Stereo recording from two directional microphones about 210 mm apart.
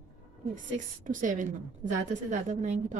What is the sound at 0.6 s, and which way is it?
A woman's voice, 35° right (ahead or behind).